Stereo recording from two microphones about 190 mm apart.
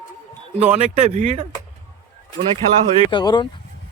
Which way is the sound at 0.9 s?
35° right (ahead or behind).